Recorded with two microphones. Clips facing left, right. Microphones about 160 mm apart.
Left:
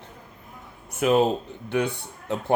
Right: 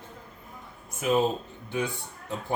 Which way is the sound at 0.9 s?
70° left (ahead or behind).